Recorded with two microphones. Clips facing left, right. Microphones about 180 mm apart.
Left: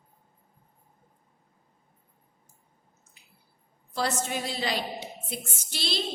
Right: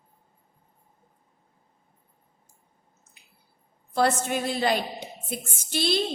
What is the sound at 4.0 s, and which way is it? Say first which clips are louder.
A woman's voice: right 6 dB; 55° right (ahead or behind).